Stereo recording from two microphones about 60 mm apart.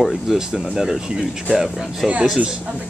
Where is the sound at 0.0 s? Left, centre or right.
Centre.